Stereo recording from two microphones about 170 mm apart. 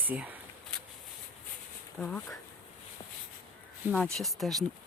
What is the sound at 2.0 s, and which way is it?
Speech, 10° left (ahead or behind).